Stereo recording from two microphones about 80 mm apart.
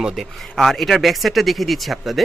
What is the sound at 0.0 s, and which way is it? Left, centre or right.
Speech, centre.